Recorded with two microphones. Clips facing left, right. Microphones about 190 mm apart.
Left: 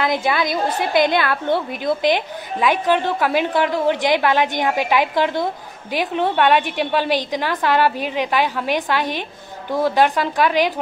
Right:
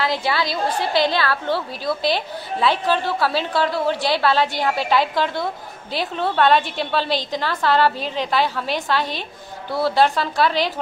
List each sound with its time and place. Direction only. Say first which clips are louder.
0.0 s a woman's voice: left 2 dB; 20° left (ahead or behind)